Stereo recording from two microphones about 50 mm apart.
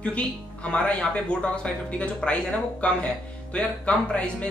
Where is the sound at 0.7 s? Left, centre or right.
Left.